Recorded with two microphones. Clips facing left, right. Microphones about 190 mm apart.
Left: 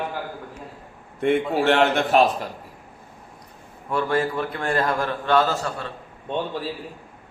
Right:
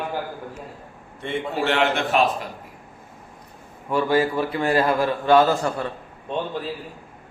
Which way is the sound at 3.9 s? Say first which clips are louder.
Right 3 dB; 5° right (ahead or behind).